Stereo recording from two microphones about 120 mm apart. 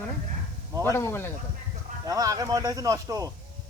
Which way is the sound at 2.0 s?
30° right (ahead or behind).